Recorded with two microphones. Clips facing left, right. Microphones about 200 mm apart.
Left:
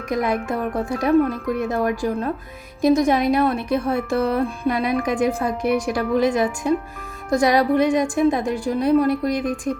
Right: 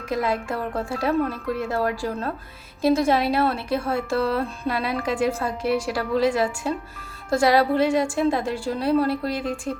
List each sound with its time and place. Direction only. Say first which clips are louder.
0.1 s a woman's voice: left 3 dB; 20° left (ahead or behind)